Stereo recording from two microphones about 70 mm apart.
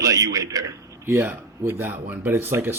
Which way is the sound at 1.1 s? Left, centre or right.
Right.